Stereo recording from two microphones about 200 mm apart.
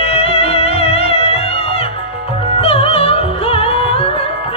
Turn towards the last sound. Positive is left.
turn(degrees=30)  # may be behind; listen again after turning